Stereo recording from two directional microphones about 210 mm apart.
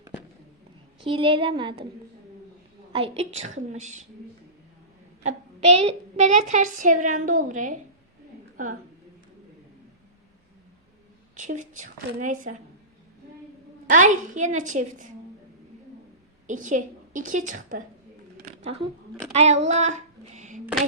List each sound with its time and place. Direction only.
1.0 s a woman's voice: 25° right (ahead or behind)
2.9 s a woman's voice: 30° right (ahead or behind)
5.7 s a woman's voice: 30° right (ahead or behind)
11.3 s a woman's voice: 35° right (ahead or behind)
13.8 s a woman's voice: 35° right (ahead or behind)
16.5 s a woman's voice: 40° right (ahead or behind)
18.3 s a sound: 35° right (ahead or behind)
19.3 s a woman's voice: 30° right (ahead or behind)